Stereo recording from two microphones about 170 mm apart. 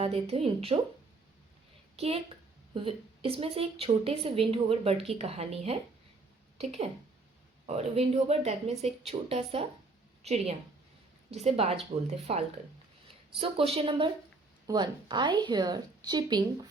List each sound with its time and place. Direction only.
0.0 s a woman's voice: 35° right (ahead or behind)
2.0 s a woman's voice: 35° right (ahead or behind)